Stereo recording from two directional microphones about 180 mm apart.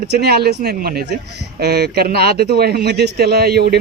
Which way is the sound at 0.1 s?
65° right (ahead or behind).